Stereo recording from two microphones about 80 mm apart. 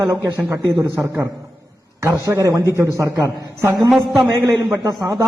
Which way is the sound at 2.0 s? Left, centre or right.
Right.